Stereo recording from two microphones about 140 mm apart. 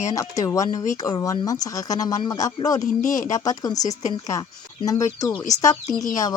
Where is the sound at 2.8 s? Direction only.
65° left (ahead or behind).